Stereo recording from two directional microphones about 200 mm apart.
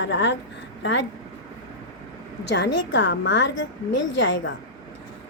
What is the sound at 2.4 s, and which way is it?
A woman's voice, 60° left (ahead or behind).